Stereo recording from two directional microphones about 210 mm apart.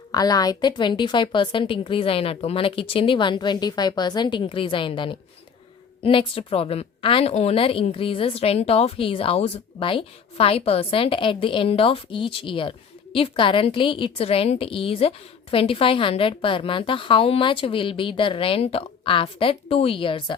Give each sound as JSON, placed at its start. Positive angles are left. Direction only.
{"t": 0.1, "sound": "a woman's voice", "side_deg": 20}